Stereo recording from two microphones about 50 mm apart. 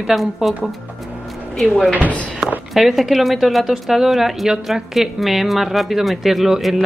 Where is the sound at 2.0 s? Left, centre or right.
Left.